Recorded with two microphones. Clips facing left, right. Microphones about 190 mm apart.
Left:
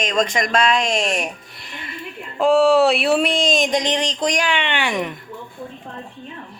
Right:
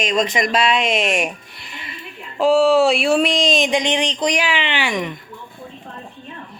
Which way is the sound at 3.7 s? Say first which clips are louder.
Right 1 dB; 35° left (ahead or behind).